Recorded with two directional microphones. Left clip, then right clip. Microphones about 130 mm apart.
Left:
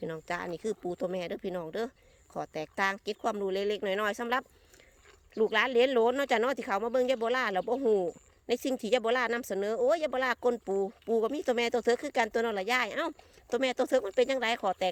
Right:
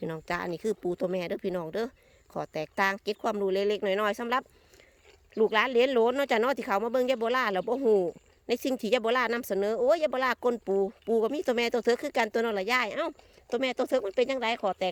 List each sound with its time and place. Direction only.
0.0 s speech: 40° right (ahead or behind); by 14.8 s 20° right (ahead or behind)